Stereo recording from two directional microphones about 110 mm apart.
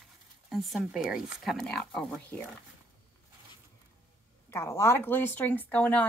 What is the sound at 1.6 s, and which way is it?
Speech, 5° left (ahead or behind).